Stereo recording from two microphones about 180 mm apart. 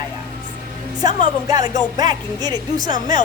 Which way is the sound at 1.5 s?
20° right (ahead or behind).